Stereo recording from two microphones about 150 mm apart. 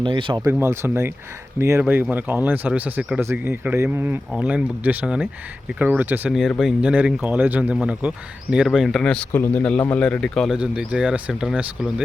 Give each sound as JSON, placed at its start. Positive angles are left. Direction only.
{"t": 0.0, "sound": "speech", "side_deg": -35}
{"t": 0.4, "sound": "speech", "side_deg": -15}
{"t": 6.3, "sound": "speech", "side_deg": 0}